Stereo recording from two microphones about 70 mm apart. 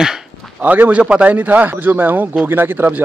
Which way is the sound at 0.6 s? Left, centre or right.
Right.